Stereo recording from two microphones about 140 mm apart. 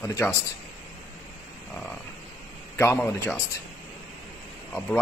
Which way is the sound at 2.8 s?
20° left (ahead or behind).